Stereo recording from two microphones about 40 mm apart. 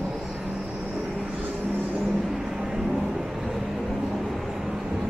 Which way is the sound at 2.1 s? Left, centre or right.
Centre.